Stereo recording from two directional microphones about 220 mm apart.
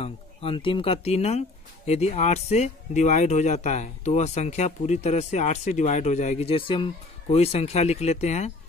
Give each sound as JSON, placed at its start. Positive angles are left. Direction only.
{"t": 0.0, "sound": "speech", "side_deg": 25}